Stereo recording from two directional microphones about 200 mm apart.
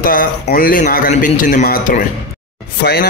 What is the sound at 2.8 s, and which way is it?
Speech, 50° left (ahead or behind).